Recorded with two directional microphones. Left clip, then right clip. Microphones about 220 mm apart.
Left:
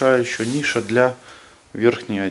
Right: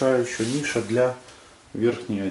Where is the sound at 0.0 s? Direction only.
Centre (ahead or behind).